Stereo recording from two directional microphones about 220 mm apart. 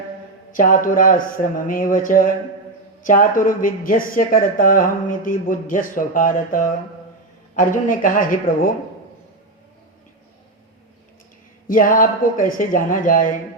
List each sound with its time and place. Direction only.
0.5 s speech: 40° left (ahead or behind)
11.7 s speech: 40° left (ahead or behind)